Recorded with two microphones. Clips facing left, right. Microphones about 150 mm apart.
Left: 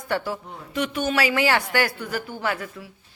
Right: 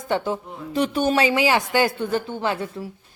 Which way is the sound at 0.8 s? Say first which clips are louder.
Right 4 dB; 30° right (ahead or behind).